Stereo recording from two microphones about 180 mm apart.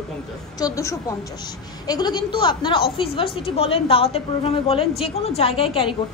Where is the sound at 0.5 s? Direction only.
20° left (ahead or behind).